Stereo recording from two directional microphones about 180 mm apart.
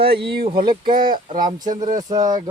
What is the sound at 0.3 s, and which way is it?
Speech, 60° right (ahead or behind).